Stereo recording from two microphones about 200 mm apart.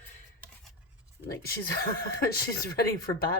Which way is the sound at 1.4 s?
50° left (ahead or behind).